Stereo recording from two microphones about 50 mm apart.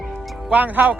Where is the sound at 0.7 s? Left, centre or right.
Right.